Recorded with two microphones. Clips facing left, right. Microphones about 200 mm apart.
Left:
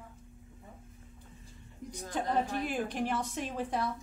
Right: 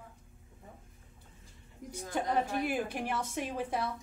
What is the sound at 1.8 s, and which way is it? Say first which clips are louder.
Speech: right 1 dB; 10° right (ahead or behind).